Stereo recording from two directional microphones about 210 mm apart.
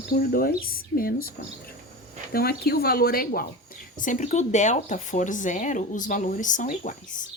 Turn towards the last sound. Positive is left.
turn(degrees=35)  # may be behind; listen again after turning